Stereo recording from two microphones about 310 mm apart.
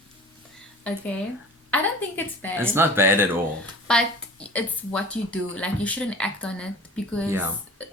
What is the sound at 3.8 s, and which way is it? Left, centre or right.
Speech, centre.